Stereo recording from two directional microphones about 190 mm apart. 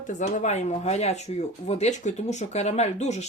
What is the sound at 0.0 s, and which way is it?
Speech, 40° left (ahead or behind).